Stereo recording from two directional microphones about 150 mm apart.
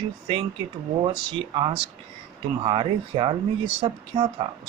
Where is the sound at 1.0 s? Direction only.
35° right (ahead or behind).